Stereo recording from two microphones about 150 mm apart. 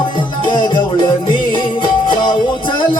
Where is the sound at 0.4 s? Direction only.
30° left (ahead or behind).